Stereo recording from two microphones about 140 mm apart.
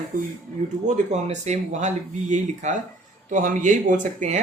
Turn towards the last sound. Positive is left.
turn(degrees=-65)  # may be behind; listen again after turning